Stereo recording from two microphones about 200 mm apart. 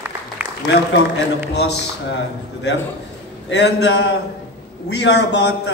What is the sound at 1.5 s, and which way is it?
Speech, 60° left (ahead or behind).